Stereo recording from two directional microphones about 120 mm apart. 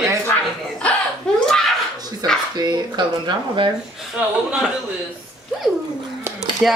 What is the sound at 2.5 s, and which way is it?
Speech, 35° right (ahead or behind).